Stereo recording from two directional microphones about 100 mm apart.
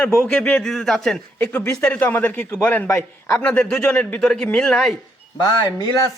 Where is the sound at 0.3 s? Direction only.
10° left (ahead or behind).